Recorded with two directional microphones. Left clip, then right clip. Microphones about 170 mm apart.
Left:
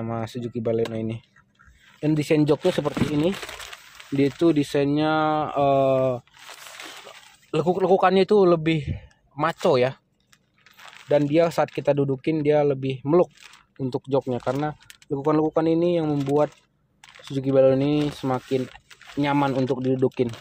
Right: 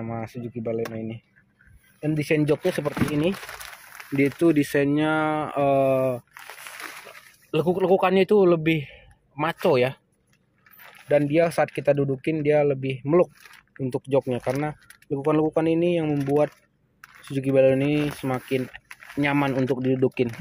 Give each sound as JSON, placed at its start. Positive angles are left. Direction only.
{"t": 0.0, "sound": "speech", "side_deg": 15}
{"t": 2.0, "sound": "a man's voice", "side_deg": 10}
{"t": 7.5, "sound": "a man's voice", "side_deg": 5}
{"t": 11.1, "sound": "a man's voice", "side_deg": 10}
{"t": 17.3, "sound": "a man's voice", "side_deg": 0}